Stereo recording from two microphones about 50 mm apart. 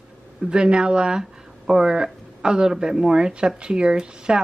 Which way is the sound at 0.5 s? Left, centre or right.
Centre.